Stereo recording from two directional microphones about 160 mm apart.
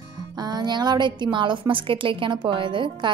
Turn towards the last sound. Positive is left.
turn(degrees=-30)  # may be behind; listen again after turning